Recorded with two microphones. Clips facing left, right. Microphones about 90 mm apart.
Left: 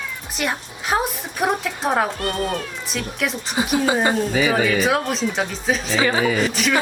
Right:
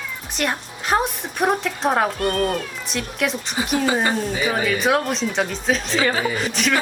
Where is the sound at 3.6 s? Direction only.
20° left (ahead or behind).